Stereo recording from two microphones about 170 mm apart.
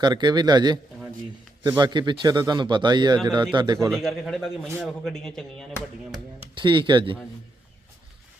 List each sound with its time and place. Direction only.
0.0 s a man's voice: 25° right (ahead or behind)
3.8 s speech: centre (ahead or behind)
6.4 s speech: 30° right (ahead or behind)